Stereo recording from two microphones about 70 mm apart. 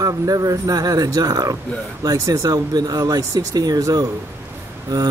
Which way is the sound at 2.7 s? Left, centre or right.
Right.